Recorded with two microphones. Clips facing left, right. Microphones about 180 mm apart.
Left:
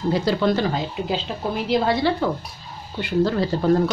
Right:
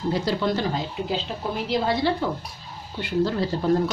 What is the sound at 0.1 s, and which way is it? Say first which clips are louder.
A woman's voice: left 4 dB; 80° left.